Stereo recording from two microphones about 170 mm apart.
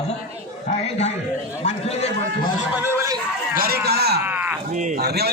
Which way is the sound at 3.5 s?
65° right (ahead or behind).